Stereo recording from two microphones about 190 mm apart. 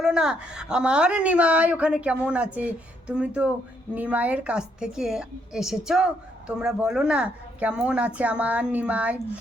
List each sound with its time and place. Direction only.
0.0 s a woman's voice: 5° right (ahead or behind)